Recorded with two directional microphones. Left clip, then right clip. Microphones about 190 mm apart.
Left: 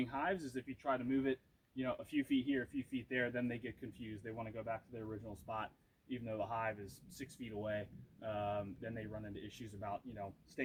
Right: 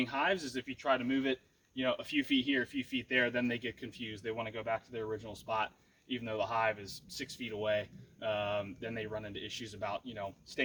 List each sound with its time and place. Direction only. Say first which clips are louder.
0.0 s a man's voice: right 7 dB; 20° right (ahead or behind)